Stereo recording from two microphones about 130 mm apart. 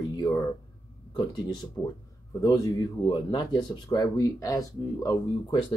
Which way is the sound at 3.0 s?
35° left (ahead or behind).